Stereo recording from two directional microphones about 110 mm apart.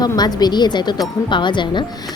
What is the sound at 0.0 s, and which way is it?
A woman's voice, 40° left (ahead or behind).